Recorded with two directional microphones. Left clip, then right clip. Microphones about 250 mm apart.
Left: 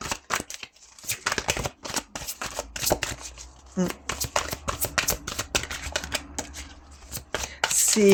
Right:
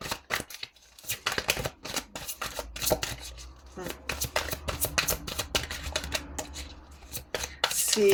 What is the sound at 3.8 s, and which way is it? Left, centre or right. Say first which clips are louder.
Shuffling cards: left 3 dB; left.